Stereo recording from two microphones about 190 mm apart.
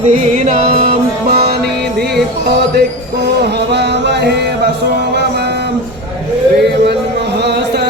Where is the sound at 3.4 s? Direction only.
60° right (ahead or behind).